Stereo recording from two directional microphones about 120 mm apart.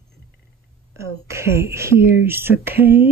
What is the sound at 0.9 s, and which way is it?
Speech, 25° right (ahead or behind).